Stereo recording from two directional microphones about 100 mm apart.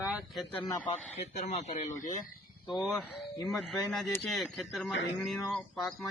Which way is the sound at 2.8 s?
Centre (ahead or behind).